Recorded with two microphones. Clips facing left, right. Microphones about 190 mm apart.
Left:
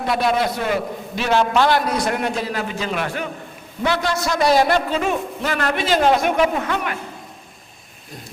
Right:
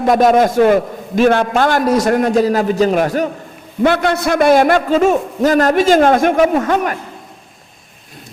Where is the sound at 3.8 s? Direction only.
55° right (ahead or behind).